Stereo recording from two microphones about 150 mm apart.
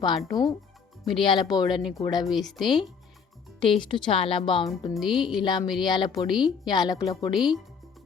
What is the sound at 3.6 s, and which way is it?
Speech, 30° left (ahead or behind).